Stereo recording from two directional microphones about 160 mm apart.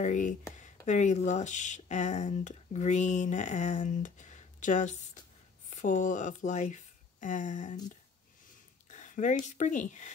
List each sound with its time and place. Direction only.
0.0 s speech: 50° left (ahead or behind)
8.9 s a sound: 50° left (ahead or behind)
9.5 s speech: 50° left (ahead or behind)